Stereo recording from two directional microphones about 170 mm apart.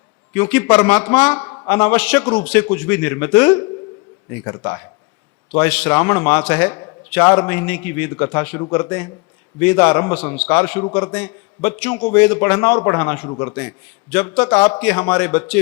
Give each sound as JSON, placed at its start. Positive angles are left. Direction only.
{"t": 0.3, "sound": "a man's voice", "side_deg": 10}